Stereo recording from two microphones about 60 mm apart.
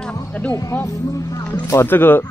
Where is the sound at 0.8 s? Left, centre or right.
Left.